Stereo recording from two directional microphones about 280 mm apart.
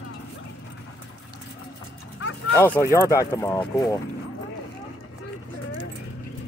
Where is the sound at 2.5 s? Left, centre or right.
Centre.